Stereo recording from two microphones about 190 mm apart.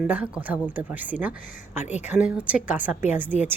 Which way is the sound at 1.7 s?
40° left (ahead or behind).